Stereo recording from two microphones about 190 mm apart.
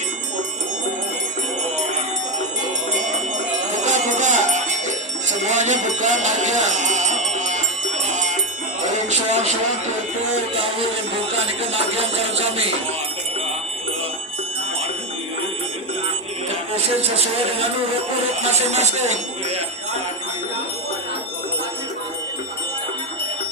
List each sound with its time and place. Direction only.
3.8 s music: 40° right (ahead or behind)
5.3 s speech: 40° right (ahead or behind)
7.3 s music: 40° right (ahead or behind)
11.7 s speech: 30° right (ahead or behind)
18.7 s speech: 35° right (ahead or behind)